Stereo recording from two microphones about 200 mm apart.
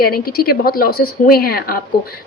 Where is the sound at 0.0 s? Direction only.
50° left (ahead or behind).